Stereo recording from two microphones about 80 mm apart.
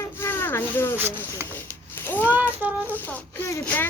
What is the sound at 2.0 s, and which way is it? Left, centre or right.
Speech, left.